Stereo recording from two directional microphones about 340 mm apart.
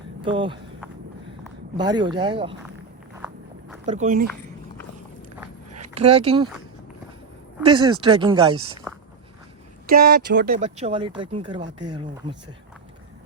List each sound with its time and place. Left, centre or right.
0.2 s speech: centre
1.7 s speech: centre
3.8 s speech: right
5.8 s speech: centre
7.6 s speech: centre
9.9 s speech: right